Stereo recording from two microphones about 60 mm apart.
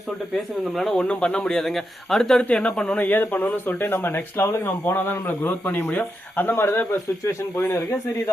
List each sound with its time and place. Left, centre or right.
0.3 s speech: centre
1.0 s speech: centre
2.5 s speech: centre
3.0 s speech: left